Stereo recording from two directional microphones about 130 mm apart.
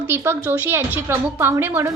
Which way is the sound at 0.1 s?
15° right (ahead or behind).